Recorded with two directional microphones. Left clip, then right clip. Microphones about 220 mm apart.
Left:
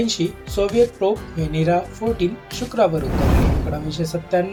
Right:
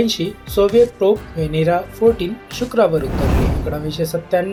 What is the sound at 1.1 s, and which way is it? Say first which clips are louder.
Speech: right 5 dB; 25° right (ahead or behind).